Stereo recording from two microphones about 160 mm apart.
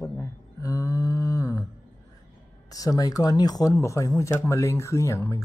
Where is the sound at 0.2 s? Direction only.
20° left (ahead or behind).